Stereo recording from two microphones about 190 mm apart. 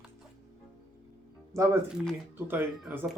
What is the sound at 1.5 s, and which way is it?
Speech, 15° right (ahead or behind).